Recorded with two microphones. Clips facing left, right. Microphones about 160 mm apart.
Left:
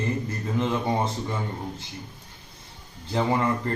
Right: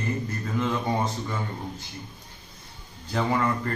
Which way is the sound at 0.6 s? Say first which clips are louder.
Left 1 dB; 20° left (ahead or behind).